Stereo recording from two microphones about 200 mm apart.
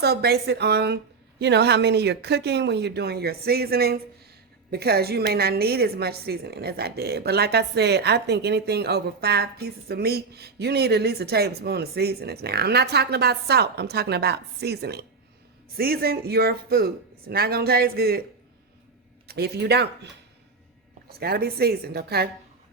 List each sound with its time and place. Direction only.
0.0 s a woman's voice: 55° right (ahead or behind)
19.3 s speech: 55° right (ahead or behind)
21.1 s a woman's voice: 50° right (ahead or behind)